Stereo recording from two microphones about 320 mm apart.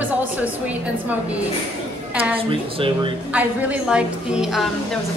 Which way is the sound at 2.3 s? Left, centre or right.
Centre.